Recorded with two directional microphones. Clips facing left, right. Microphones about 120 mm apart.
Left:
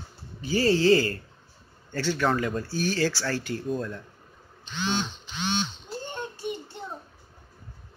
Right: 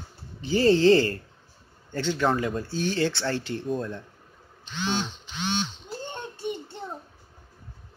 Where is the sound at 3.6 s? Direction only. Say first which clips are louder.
Right 1 dB; centre (ahead or behind).